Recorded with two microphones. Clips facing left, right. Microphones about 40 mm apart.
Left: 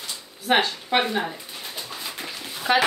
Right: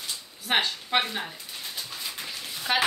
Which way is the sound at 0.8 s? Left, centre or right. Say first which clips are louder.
Left 4 dB; centre.